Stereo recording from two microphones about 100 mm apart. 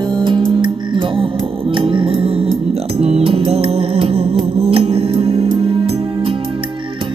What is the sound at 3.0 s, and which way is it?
Music, 90° right.